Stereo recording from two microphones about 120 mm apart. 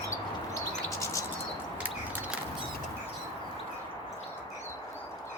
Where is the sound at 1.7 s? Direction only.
15° right (ahead or behind).